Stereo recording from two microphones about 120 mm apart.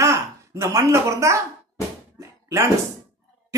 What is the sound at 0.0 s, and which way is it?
Speech, 25° right (ahead or behind).